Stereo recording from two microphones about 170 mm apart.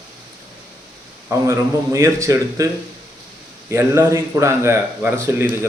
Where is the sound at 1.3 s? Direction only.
15° right (ahead or behind).